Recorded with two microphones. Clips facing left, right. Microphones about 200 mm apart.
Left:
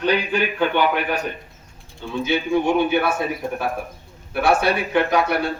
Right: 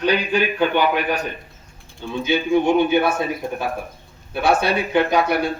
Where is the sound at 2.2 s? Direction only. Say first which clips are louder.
Right 2 dB; 15° right (ahead or behind).